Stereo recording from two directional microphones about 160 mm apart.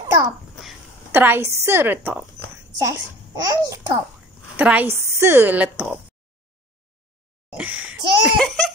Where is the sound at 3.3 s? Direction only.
20° right (ahead or behind).